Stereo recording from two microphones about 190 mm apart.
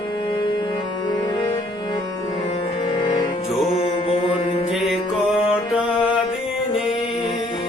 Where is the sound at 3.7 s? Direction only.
30° left (ahead or behind).